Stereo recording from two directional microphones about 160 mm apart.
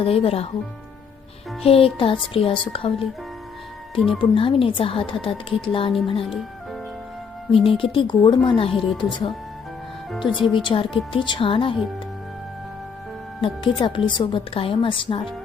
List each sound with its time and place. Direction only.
0.0 s a woman's voice: 35° left (ahead or behind)
1.6 s a woman's voice: 35° left (ahead or behind)
4.2 s a woman's voice: 35° left (ahead or behind)
7.5 s a woman's voice: 35° left (ahead or behind)
13.4 s a woman's voice: 30° left (ahead or behind)